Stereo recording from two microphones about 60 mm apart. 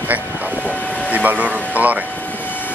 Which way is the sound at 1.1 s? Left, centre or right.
Right.